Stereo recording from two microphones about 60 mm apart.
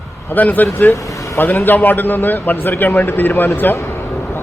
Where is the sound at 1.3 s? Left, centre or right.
Left.